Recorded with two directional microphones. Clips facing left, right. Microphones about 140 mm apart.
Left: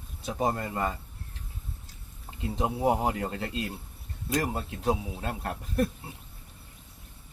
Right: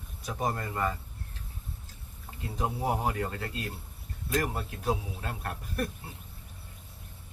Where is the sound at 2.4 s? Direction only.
20° left (ahead or behind).